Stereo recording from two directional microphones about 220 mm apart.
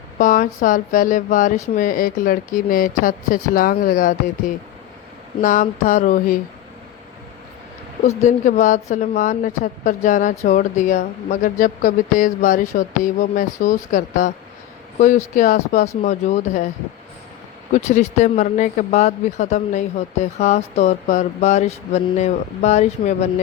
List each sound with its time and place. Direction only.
0.2 s speech: 40° left (ahead or behind)
5.4 s speech: 40° left (ahead or behind)
8.0 s speech: 30° left (ahead or behind)
17.7 s speech: 30° left (ahead or behind)